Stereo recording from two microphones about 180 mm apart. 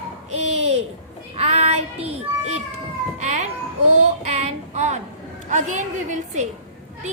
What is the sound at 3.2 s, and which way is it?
Children playing, 40° right (ahead or behind).